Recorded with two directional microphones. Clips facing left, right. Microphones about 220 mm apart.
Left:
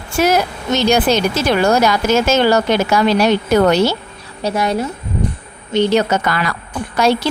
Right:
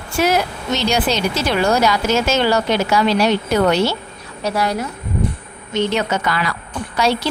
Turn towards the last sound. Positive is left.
turn(degrees=50)  # may be behind; listen again after turning